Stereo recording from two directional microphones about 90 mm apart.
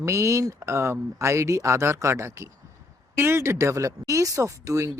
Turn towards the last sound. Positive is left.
turn(degrees=-35)  # may be behind; listen again after turning